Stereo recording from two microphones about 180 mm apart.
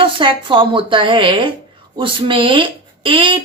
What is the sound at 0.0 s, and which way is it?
Speech, 30° right (ahead or behind).